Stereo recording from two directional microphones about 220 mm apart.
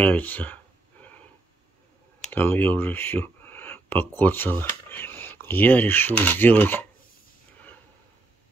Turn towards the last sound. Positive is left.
turn(degrees=10)  # may be behind; listen again after turning